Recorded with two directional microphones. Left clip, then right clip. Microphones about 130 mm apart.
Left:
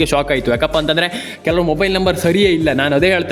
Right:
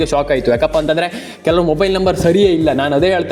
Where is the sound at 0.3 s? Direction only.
10° left (ahead or behind).